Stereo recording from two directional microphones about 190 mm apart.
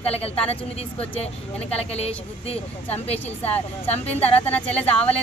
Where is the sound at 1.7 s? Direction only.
35° left (ahead or behind).